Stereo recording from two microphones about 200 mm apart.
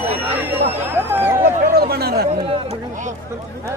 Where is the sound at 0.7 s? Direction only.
10° right (ahead or behind).